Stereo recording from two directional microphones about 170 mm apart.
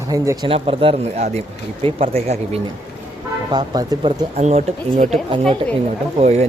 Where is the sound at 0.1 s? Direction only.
20° right (ahead or behind).